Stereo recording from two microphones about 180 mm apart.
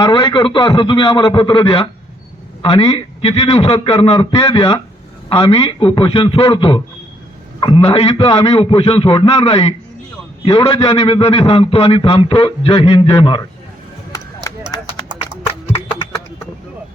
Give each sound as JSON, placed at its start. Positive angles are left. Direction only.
{"t": 0.0, "sound": "a man's voice", "side_deg": 25}
{"t": 14.5, "sound": "clip-clop", "side_deg": 15}